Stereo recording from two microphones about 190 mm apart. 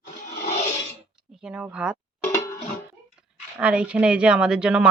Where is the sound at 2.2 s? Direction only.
15° left (ahead or behind).